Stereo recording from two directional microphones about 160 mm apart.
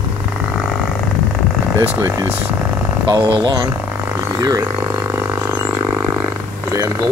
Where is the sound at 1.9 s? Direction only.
15° right (ahead or behind).